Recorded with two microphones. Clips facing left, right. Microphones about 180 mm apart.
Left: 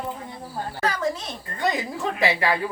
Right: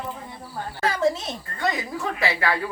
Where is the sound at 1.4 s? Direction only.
20° left (ahead or behind).